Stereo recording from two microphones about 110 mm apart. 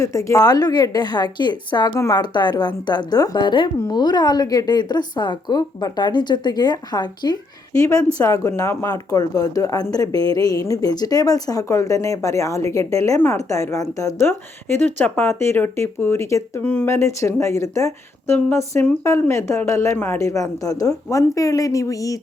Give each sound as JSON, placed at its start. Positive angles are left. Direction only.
{"t": 0.0, "sound": "speech", "side_deg": 30}
{"t": 7.8, "sound": "speech", "side_deg": 30}
{"t": 14.2, "sound": "speech", "side_deg": 20}